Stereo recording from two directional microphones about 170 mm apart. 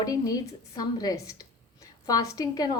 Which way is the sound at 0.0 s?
20° left (ahead or behind).